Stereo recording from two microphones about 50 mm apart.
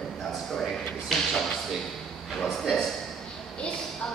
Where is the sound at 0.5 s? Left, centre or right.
Centre.